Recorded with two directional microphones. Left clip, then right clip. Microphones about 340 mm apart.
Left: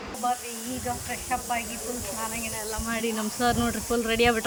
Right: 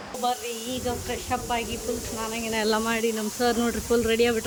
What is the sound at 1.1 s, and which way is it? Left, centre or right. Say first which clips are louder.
Speech: right 1 dB; centre.